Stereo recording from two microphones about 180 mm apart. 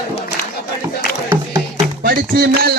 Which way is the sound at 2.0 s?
60° right (ahead or behind).